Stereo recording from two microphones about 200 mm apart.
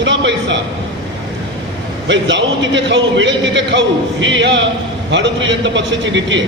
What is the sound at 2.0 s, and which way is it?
A man's voice, 65° right (ahead or behind).